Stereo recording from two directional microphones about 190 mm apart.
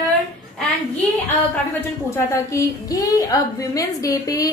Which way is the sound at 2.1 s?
15° left (ahead or behind).